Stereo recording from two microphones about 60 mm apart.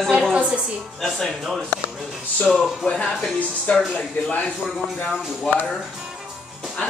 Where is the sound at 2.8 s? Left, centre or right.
Centre.